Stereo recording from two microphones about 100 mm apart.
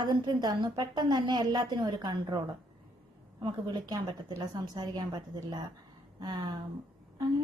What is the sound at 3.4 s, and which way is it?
A woman's voice, 45° right (ahead or behind).